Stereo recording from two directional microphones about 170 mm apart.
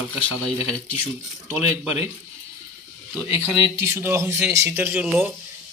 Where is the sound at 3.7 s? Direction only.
15° right (ahead or behind).